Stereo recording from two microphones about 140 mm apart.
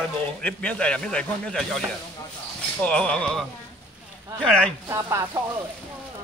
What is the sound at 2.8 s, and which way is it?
Speech, 5° left (ahead or behind).